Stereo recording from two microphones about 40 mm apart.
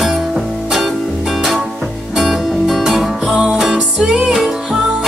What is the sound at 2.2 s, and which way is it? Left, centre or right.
Music, centre.